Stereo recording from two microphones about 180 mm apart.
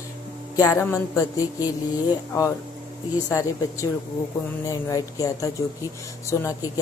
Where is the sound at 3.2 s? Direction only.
20° left (ahead or behind).